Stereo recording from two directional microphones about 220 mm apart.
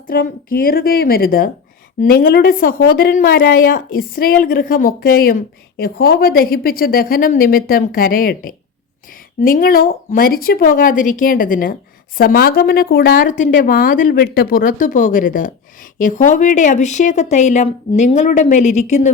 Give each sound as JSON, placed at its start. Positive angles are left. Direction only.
{"t": 0.1, "sound": "a woman's voice", "side_deg": 40}